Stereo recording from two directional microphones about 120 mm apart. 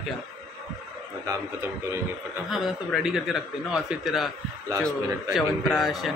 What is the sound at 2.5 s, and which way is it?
A man's voice, 5° right (ahead or behind).